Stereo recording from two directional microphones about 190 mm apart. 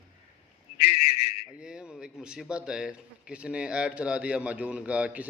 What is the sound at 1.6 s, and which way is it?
Speech, 5° right (ahead or behind).